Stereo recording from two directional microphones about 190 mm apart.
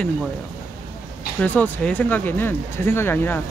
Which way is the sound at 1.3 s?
10° left (ahead or behind).